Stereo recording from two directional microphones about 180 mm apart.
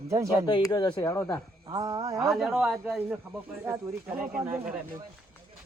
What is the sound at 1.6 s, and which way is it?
Speech, 20° right (ahead or behind).